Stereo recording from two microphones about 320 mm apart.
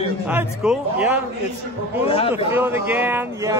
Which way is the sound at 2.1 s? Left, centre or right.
Centre.